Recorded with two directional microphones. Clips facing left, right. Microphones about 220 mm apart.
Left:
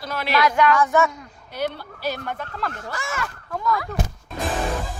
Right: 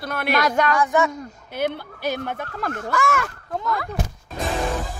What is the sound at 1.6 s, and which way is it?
Speech, 50° right (ahead or behind).